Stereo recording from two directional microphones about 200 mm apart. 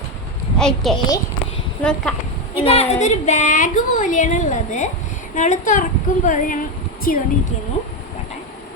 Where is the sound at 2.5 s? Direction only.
30° left (ahead or behind); by 7.2 s 45° left (ahead or behind).